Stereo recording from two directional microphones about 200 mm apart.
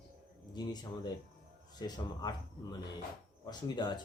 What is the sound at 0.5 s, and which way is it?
A man's voice, 20° left (ahead or behind).